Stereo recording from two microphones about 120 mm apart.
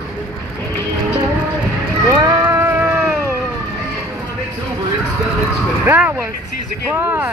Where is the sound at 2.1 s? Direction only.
35° right (ahead or behind).